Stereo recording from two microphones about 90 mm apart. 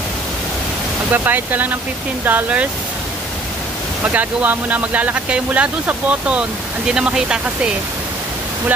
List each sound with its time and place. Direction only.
1.1 s speech: 20° right (ahead or behind)
4.0 s speech: 15° right (ahead or behind)